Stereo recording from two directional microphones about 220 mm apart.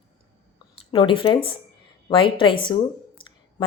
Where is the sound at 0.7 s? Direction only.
20° left (ahead or behind).